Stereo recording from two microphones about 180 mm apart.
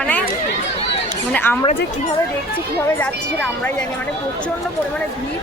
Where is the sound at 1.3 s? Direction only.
10° left (ahead or behind).